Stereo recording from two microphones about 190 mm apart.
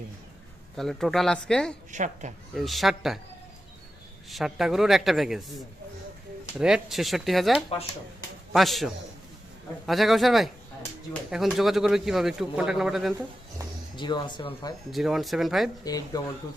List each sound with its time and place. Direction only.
0.8 s speech: centre (ahead or behind)
1.9 s a woman's voice: 40° right (ahead or behind)
2.6 s speech: centre (ahead or behind)
4.3 s speech: centre (ahead or behind)
13.9 s speech: 25° left (ahead or behind)
14.8 s speech: centre (ahead or behind)
15.8 s speech: 20° left (ahead or behind)